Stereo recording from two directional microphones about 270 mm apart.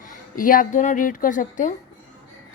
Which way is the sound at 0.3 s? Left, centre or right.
Left.